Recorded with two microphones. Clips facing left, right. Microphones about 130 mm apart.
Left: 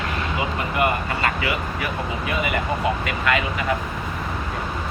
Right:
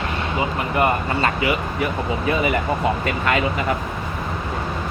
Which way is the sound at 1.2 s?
25° right (ahead or behind).